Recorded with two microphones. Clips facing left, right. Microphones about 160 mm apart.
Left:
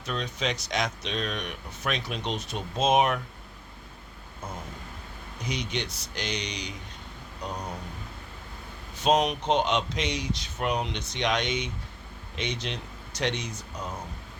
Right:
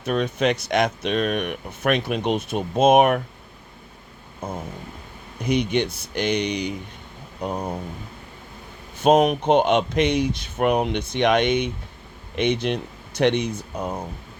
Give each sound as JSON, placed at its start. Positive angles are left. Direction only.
{"t": 0.0, "sound": "speech", "side_deg": -55}
{"t": 4.4, "sound": "speech", "side_deg": -55}
{"t": 9.0, "sound": "speech", "side_deg": -55}